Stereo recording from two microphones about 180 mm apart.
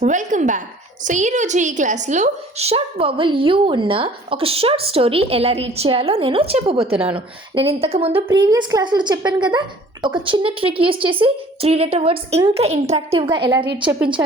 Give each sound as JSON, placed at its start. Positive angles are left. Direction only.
{"t": 0.0, "sound": "a woman's voice", "side_deg": -45}
{"t": 14.2, "sound": "speech", "side_deg": -15}